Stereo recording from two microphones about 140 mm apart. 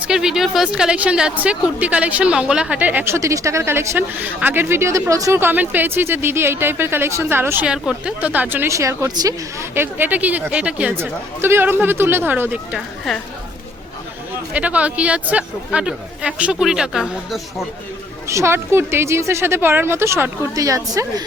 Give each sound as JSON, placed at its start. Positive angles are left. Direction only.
{"t": 0.1, "sound": "a woman's voice", "side_deg": -5}
{"t": 13.1, "sound": "a woman's voice", "side_deg": 0}
{"t": 14.5, "sound": "a woman's voice", "side_deg": -10}
{"t": 18.3, "sound": "a woman's voice", "side_deg": -20}